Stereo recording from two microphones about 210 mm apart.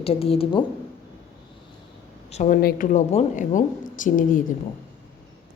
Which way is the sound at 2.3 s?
30° left (ahead or behind).